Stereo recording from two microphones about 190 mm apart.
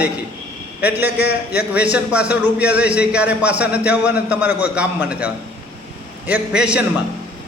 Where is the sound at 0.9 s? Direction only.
10° right (ahead or behind).